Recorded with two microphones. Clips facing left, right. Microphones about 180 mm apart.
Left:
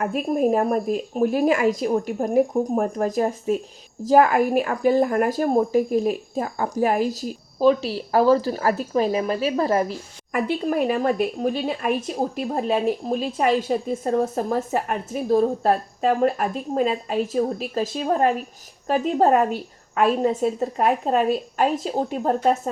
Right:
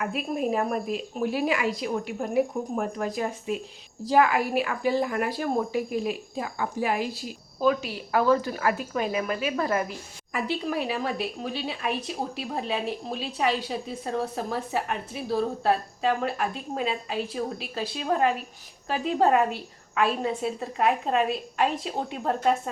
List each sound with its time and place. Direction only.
0.0 s speech: 45° left (ahead or behind)
10.3 s speech: 50° left (ahead or behind)